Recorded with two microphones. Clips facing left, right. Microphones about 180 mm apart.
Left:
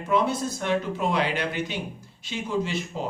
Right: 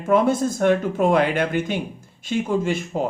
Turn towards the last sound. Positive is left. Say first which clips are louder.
# right 6 dB
turn(degrees=-50)  # may be behind; listen again after turning